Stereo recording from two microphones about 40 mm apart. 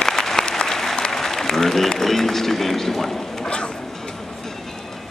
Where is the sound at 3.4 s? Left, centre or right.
Left.